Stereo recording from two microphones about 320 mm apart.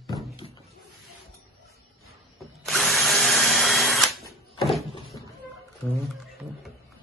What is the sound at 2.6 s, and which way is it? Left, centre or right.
Drill, centre.